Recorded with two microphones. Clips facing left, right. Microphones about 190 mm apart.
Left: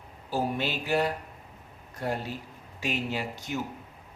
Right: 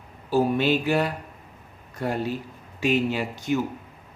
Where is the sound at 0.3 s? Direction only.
65° right (ahead or behind).